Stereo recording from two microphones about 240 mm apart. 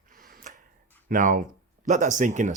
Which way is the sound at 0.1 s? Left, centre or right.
Right.